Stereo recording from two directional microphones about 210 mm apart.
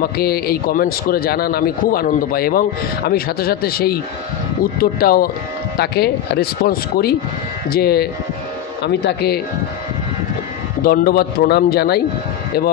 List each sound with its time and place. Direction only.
0.0 s a man's voice: 45° left (ahead or behind)
10.8 s a man's voice: 45° left (ahead or behind)